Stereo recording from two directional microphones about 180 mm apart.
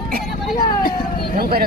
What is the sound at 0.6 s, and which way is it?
Vehicle, 55° left (ahead or behind).